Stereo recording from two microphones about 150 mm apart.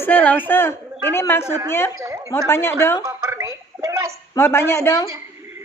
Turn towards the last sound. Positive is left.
turn(degrees=15)  # may be behind; listen again after turning